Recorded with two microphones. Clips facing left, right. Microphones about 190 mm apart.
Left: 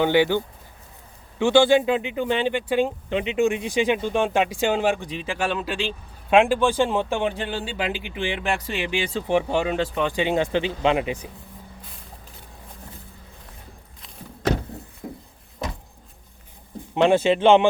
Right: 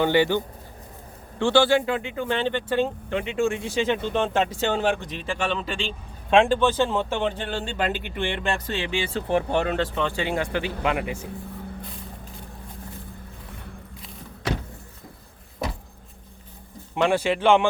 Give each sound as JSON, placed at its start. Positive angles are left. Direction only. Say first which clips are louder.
{"t": 0.0, "sound": "speech", "louder": "left 1 dB", "side_deg": 15}
{"t": 15.0, "sound": "a sound", "louder": "left 13 dB", "side_deg": 60}
{"t": 16.9, "sound": "speech", "louder": "left 4 dB", "side_deg": 25}